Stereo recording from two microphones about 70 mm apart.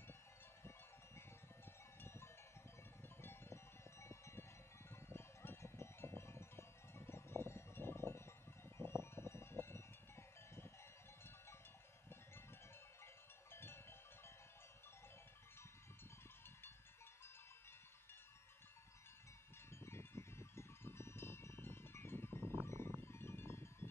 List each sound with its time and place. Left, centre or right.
2.0 s cowbell: left
3.2 s a sound: left
8.6 s music: left
13.0 s sheep: left
19.7 s music: left